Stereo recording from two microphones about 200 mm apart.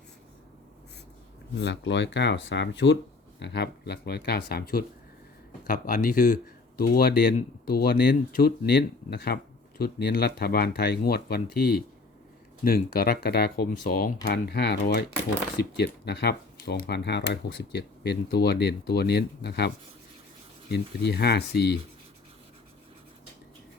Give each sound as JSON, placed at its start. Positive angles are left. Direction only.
{"t": 1.5, "sound": "speech", "side_deg": 60}